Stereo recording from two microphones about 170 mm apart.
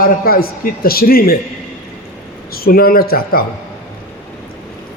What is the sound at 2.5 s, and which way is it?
Speech, 60° left (ahead or behind).